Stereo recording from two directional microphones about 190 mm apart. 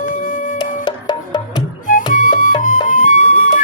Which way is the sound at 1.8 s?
45° left (ahead or behind).